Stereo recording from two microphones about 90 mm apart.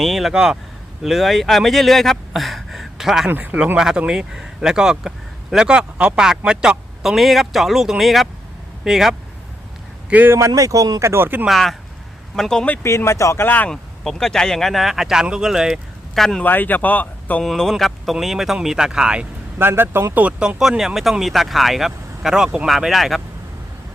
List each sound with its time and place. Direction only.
0.0 s speech: centre (ahead or behind)
3.2 s speech: 20° right (ahead or behind)
10.1 s speech: 20° right (ahead or behind)
10.3 s speech: 35° right (ahead or behind)
11.0 s speech: 25° right (ahead or behind)
11.4 s speech: centre (ahead or behind)
12.6 s speech: 20° left (ahead or behind)
13.0 s speech: 35° left (ahead or behind)
13.7 s speech: 5° left (ahead or behind)
16.4 s speech: 20° left (ahead or behind)
17.4 s speech: centre (ahead or behind)
19.5 s speech: 25° right (ahead or behind)
20.2 s speech: 10° right (ahead or behind)